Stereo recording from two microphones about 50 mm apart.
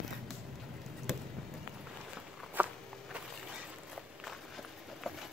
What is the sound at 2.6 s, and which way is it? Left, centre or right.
Walk, right.